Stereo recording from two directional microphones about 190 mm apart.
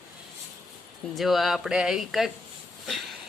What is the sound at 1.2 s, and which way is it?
Speech, centre (ahead or behind).